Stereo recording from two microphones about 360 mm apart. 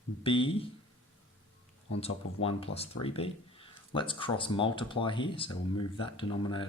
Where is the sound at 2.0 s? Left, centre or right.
Centre.